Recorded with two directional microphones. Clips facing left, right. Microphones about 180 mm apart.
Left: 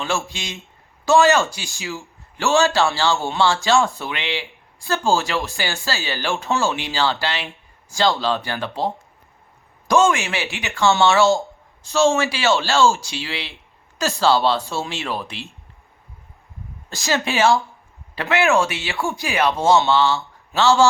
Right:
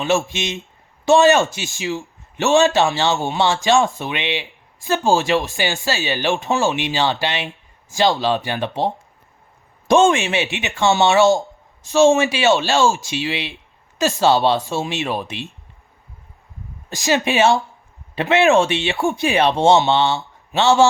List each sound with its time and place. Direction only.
0.3 s a man's voice: 20° right (ahead or behind)
16.9 s a man's voice: 15° right (ahead or behind)